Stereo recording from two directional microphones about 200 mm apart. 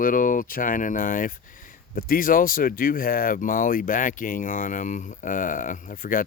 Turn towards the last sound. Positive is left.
turn(degrees=45)  # may be behind; listen again after turning